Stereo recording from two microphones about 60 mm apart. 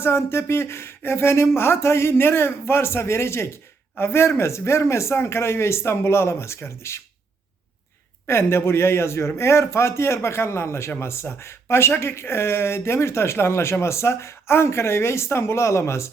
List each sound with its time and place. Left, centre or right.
0.0 s speech: left
8.3 s speech: left